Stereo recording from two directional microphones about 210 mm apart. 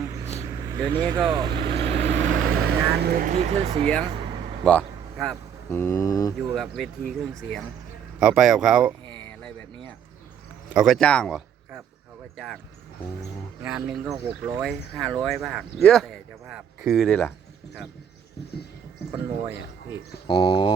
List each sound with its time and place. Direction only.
0.6 s speech: 15° right (ahead or behind)
1.6 s vehicle: 25° right (ahead or behind)
4.6 s vehicle: 5° left (ahead or behind)
5.7 s speech: 15° left (ahead or behind)
6.5 s speech: centre (ahead or behind)
10.8 s speech: centre (ahead or behind)
13.6 s speech: 5° right (ahead or behind)
19.2 s speech: 10° right (ahead or behind)
20.2 s speech: 20° left (ahead or behind)